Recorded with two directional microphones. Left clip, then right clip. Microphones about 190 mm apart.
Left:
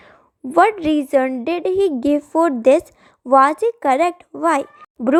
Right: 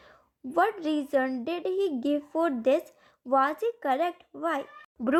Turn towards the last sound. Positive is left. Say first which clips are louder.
# left 10 dB
turn(degrees=25)  # may be behind; listen again after turning